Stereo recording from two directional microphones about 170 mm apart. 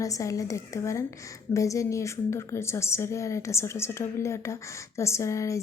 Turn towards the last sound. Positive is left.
turn(degrees=15)  # may be behind; listen again after turning